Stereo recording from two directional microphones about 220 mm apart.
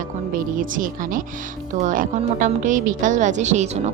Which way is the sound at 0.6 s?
40° right (ahead or behind).